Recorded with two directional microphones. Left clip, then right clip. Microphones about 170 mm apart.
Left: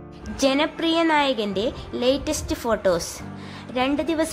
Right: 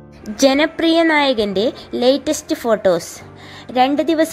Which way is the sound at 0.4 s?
25° right (ahead or behind).